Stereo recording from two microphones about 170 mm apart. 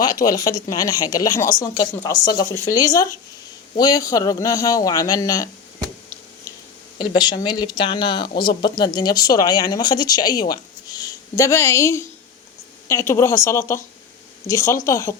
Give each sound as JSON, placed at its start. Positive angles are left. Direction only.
{"t": 0.0, "sound": "speech", "side_deg": 20}
{"t": 7.0, "sound": "a woman's voice", "side_deg": 25}